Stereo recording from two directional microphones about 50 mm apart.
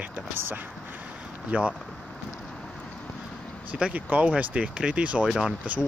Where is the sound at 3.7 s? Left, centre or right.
Right.